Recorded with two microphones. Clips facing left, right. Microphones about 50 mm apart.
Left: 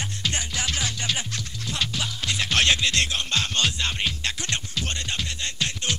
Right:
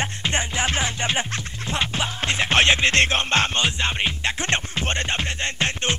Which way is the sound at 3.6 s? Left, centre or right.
Right.